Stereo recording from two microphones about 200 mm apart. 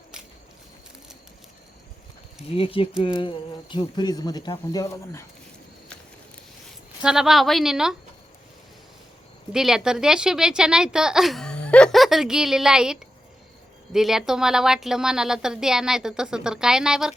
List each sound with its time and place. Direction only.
2.5 s speech: 30° left (ahead or behind)
7.0 s a woman's voice: 5° right (ahead or behind)
9.5 s a woman's voice: centre (ahead or behind)